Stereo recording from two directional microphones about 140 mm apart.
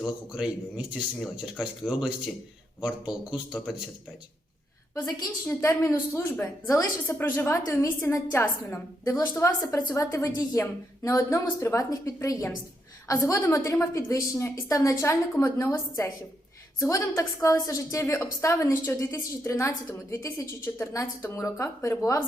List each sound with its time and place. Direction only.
0.0 s speech: 5° right (ahead or behind)
5.0 s a woman's voice: 20° left (ahead or behind)